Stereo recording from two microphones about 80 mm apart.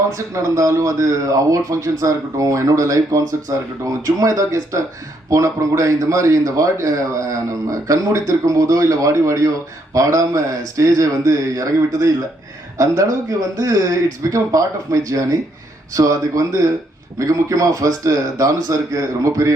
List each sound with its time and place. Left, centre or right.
0.1 s a man's voice: right